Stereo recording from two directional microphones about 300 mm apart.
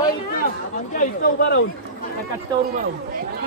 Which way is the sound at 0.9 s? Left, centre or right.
Left.